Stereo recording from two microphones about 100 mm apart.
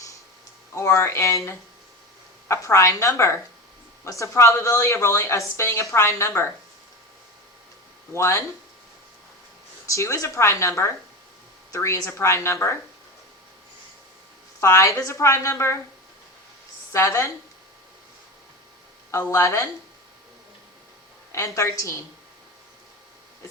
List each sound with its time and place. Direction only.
0.8 s speech: 30° left (ahead or behind)
8.1 s speech: 30° left (ahead or behind)
9.9 s speech: 30° left (ahead or behind)
14.6 s speech: 30° left (ahead or behind)
16.9 s speech: 30° left (ahead or behind)
19.1 s speech: 25° left (ahead or behind)
21.3 s speech: 30° left (ahead or behind)